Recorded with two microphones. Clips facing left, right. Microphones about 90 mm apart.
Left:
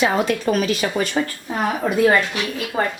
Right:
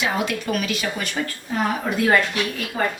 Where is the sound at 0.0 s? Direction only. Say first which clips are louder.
Left 5 dB; 35° left (ahead or behind).